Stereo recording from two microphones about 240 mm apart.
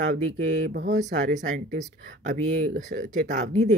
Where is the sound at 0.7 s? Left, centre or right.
Right.